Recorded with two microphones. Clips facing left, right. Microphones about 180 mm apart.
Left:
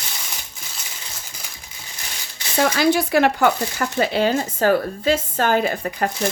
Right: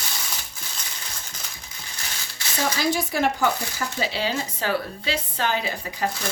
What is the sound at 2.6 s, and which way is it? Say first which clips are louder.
Speech: left 7 dB; 70° left (ahead or behind).